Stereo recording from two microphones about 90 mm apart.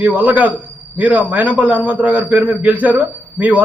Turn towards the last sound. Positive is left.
turn(degrees=-15)  # may be behind; listen again after turning